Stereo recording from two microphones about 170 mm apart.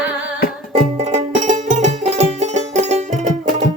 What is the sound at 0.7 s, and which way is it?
Music, 45° right (ahead or behind).